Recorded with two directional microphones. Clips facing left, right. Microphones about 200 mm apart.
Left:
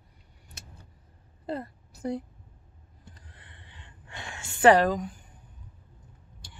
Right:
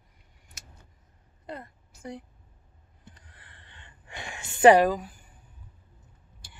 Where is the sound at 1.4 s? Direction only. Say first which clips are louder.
Left 7 dB; 35° left (ahead or behind).